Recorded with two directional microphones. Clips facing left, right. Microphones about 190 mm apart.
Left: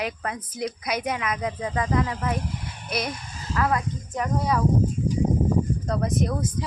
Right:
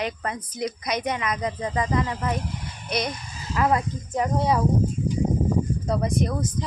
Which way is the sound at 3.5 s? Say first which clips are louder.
Right 2 dB; 20° right (ahead or behind).